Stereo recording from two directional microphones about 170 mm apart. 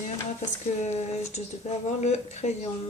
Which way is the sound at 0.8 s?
40° left (ahead or behind).